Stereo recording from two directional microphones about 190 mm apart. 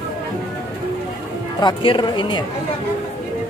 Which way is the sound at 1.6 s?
25° left (ahead or behind).